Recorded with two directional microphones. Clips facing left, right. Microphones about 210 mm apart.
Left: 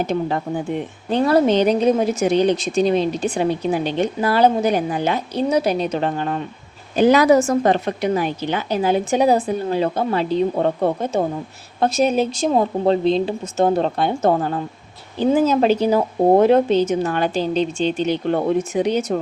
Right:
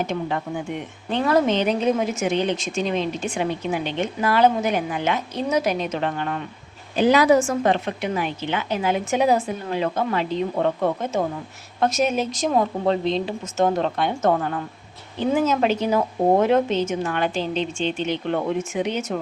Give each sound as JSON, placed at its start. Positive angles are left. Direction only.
{"t": 0.0, "sound": "speech", "side_deg": 35}
{"t": 6.9, "sound": "speech", "side_deg": 45}